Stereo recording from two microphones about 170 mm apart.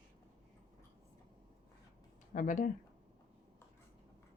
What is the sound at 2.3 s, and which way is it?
Speech, 50° left (ahead or behind).